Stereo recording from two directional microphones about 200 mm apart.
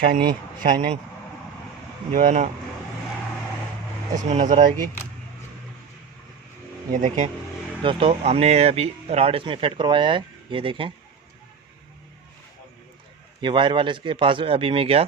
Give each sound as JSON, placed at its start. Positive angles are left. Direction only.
{"t": 0.0, "sound": "speech", "side_deg": -45}
{"t": 2.1, "sound": "speech", "side_deg": -40}
{"t": 4.3, "sound": "speech", "side_deg": -35}
{"t": 6.9, "sound": "speech", "side_deg": -40}
{"t": 7.8, "sound": "speech", "side_deg": -25}
{"t": 13.4, "sound": "speech", "side_deg": -25}